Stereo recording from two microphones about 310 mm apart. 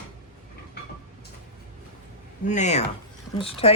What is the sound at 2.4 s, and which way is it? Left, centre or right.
Speech, left.